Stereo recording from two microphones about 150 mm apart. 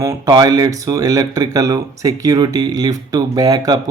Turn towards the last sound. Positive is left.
turn(degrees=-25)  # may be behind; listen again after turning